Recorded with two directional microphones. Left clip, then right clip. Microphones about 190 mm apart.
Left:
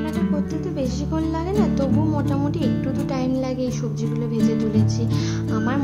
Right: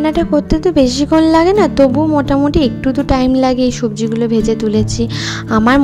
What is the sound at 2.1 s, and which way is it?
A woman's voice, 40° right (ahead or behind).